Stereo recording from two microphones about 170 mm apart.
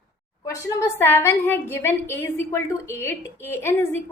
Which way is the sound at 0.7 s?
15° left (ahead or behind).